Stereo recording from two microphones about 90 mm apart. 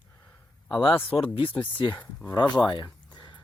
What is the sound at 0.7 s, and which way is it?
Speech, 70° left (ahead or behind).